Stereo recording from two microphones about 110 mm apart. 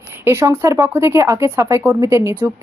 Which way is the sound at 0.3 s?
20° right (ahead or behind).